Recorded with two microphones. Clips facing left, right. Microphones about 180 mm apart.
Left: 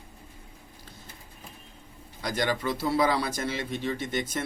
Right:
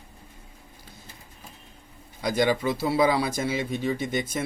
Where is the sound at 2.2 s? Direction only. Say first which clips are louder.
Right 5 dB; 10° right (ahead or behind).